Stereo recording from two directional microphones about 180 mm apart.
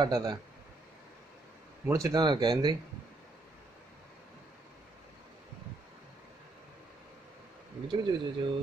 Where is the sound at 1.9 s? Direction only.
20° right (ahead or behind).